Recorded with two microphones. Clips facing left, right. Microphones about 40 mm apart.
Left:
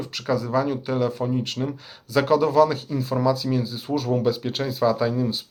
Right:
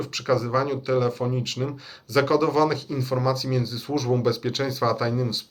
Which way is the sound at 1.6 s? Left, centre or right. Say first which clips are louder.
Left 2 dB; centre.